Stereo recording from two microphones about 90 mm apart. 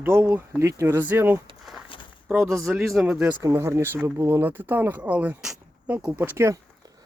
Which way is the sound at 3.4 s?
35° right (ahead or behind).